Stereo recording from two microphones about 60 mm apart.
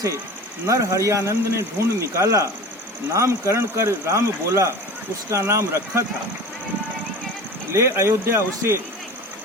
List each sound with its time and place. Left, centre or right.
0.7 s speech: right
7.7 s speech: right